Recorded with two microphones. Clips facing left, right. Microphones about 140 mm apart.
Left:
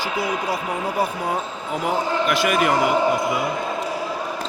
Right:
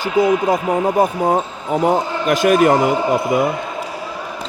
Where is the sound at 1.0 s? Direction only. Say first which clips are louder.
Right 7 dB; 45° right (ahead or behind).